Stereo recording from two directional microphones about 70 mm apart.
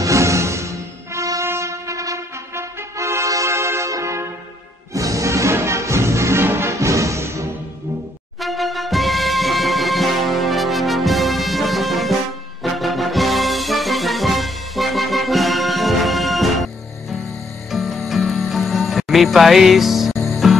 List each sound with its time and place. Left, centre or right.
0.0 s music: right
8.4 s music: centre